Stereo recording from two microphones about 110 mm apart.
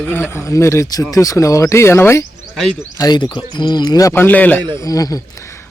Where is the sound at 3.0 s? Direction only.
40° left (ahead or behind).